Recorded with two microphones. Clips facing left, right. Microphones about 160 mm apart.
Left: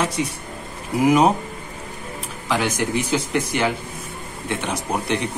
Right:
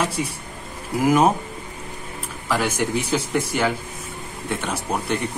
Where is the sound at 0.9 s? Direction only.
Centre (ahead or behind).